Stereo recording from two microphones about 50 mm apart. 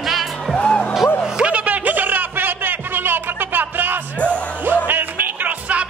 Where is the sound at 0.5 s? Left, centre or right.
Left.